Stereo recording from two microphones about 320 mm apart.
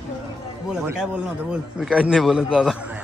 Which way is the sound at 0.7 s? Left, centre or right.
Centre.